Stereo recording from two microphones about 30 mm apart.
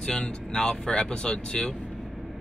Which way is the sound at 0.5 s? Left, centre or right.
Left.